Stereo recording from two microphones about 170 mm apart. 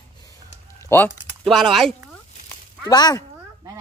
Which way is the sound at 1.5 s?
Centre (ahead or behind).